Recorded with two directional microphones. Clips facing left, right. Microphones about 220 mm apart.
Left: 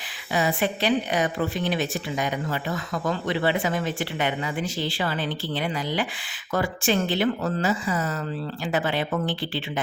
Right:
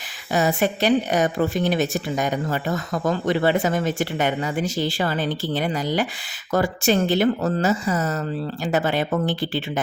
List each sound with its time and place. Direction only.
0.3 s a woman's voice: 45° right (ahead or behind)